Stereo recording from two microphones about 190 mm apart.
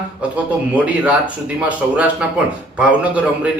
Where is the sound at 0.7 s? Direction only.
5° right (ahead or behind).